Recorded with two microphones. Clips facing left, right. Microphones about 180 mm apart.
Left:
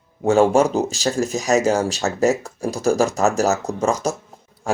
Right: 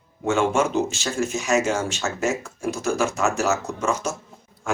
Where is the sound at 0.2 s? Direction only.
35° left (ahead or behind).